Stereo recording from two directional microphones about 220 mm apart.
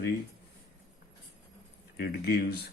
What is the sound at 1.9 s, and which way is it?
Speech, 45° left (ahead or behind).